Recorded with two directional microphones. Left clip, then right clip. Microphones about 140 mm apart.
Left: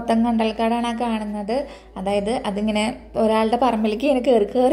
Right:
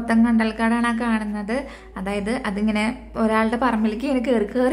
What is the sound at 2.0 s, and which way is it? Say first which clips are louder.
Speech: left 4 dB; 45° right (ahead or behind).